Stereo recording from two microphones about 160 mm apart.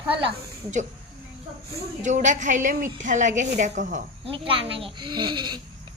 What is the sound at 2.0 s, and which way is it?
A woman's voice, 50° right (ahead or behind).